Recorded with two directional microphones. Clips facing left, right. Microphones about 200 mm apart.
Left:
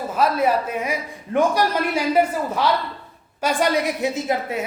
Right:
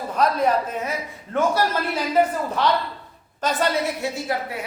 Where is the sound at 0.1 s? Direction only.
5° left (ahead or behind).